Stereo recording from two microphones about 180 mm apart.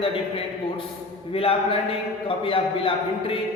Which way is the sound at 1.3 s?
30° left (ahead or behind).